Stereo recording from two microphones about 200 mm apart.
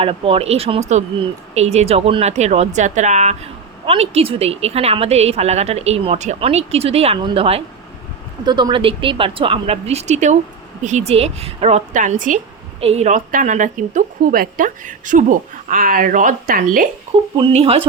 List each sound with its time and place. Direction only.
0.0 s speech: 30° right (ahead or behind)
17.3 s speech: 25° right (ahead or behind)